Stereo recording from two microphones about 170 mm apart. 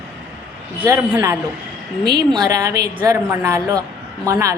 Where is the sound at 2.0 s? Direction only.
70° right (ahead or behind).